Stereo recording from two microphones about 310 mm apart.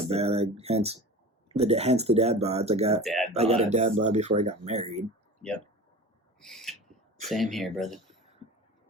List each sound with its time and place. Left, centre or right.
0.1 s speech: centre
3.0 s speech: centre
3.3 s speech: centre
6.4 s speech: centre